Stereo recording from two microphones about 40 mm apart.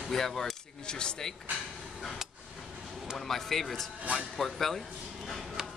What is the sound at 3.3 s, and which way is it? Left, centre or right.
Speech, centre.